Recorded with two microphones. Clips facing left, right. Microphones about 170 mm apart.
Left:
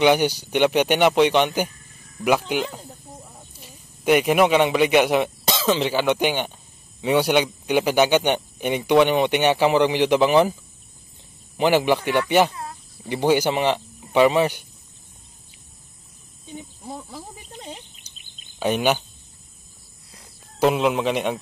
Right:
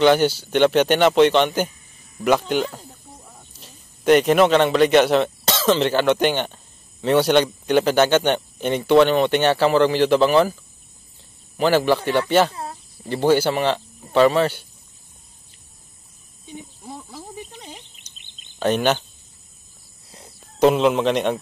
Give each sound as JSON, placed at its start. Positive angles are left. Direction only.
{"t": 0.0, "sound": "a man's voice", "side_deg": 15}
{"t": 11.5, "sound": "speech", "side_deg": 20}
{"t": 17.9, "sound": "bird vocalization", "side_deg": 5}
{"t": 20.5, "sound": "speech", "side_deg": 5}